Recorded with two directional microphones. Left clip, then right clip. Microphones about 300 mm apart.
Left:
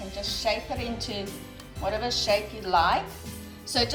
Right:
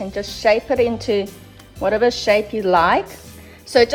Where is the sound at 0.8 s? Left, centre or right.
Centre.